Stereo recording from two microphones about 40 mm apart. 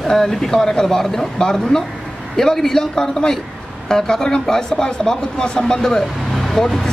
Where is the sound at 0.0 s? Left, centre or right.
Centre.